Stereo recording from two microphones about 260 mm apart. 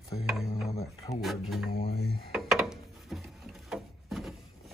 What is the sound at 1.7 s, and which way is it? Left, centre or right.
Speech, left.